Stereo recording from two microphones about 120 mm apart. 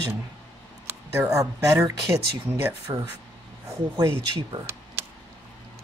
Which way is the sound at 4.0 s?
30° right (ahead or behind).